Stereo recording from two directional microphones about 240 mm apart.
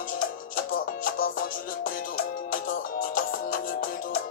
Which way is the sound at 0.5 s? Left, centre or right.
Left.